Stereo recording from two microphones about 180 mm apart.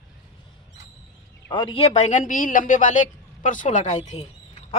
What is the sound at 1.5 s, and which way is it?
Speech, 25° left (ahead or behind).